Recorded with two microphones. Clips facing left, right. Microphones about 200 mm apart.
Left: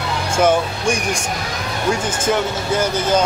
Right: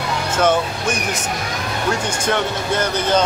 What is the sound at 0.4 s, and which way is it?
Speech, 10° left (ahead or behind).